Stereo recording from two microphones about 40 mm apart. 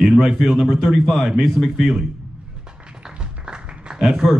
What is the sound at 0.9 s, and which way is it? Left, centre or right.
Speech, centre.